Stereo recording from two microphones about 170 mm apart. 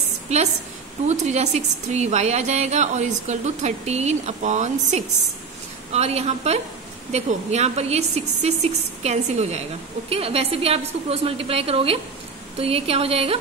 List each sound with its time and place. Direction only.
0.3 s a woman's voice: 40° right (ahead or behind)